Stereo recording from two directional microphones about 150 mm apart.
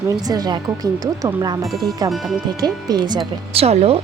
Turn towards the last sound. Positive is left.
turn(degrees=-45)  # may be behind; listen again after turning